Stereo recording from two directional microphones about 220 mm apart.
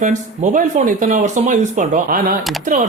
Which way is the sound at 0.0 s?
35° right (ahead or behind).